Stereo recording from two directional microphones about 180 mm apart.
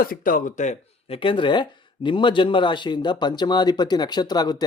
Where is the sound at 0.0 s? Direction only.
50° left (ahead or behind).